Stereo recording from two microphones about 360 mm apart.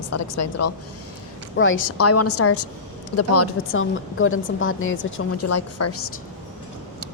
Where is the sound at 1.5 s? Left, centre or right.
Left.